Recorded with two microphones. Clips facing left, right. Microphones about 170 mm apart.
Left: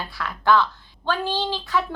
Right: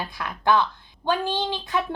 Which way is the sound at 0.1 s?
15° right (ahead or behind).